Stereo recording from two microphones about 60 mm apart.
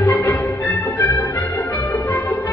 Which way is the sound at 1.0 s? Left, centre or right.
Left.